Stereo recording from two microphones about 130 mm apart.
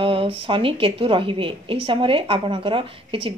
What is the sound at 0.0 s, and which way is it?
A woman's voice, 45° right (ahead or behind).